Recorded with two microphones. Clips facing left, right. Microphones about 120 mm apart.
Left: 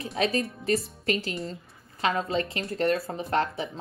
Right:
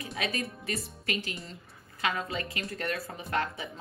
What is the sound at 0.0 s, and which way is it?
A woman's voice, 30° left (ahead or behind).